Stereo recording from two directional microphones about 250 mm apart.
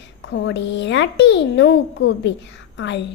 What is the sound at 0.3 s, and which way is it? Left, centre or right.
A child's voice, left.